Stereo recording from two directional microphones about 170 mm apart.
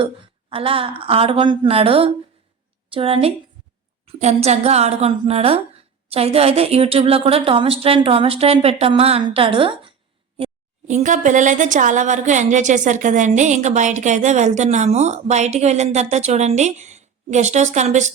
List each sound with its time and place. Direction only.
0.5 s a woman's voice: 35° right (ahead or behind)